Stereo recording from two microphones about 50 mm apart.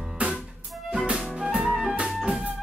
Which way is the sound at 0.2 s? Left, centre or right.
Right.